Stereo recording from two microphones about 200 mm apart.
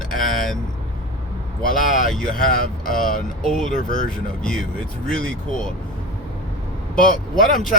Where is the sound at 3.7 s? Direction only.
40° left (ahead or behind).